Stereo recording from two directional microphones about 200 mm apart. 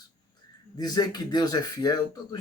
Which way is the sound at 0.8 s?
20° left (ahead or behind).